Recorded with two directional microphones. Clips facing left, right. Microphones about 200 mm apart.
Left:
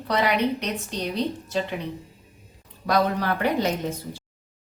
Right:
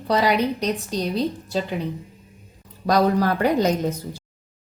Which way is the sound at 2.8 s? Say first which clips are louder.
Right 4 dB; 40° right (ahead or behind).